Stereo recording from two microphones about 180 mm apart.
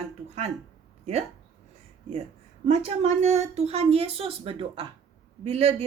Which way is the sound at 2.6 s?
35° right (ahead or behind).